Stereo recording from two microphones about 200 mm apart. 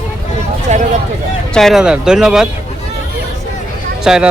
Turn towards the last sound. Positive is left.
turn(degrees=-5)  # may be behind; listen again after turning